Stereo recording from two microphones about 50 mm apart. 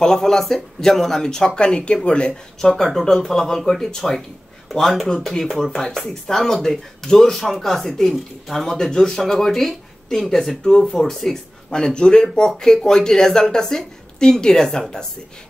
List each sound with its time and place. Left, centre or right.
0.0 s speech: centre
2.6 s speech: centre